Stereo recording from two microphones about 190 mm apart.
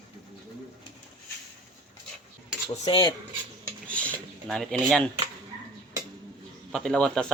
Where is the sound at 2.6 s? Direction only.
25° left (ahead or behind).